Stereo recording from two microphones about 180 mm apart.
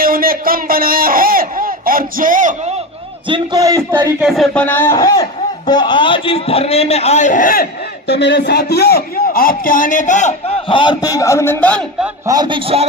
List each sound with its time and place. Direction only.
0.0 s speech: 55° right (ahead or behind)
3.2 s a man's voice: 25° right (ahead or behind); by 11.9 s 5° left (ahead or behind)
12.2 s a man's voice: 20° right (ahead or behind)